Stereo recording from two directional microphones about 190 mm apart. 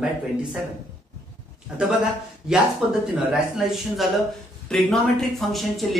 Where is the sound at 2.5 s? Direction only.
5° right (ahead or behind).